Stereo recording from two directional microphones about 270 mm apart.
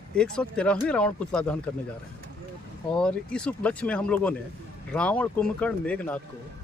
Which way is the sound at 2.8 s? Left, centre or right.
Centre.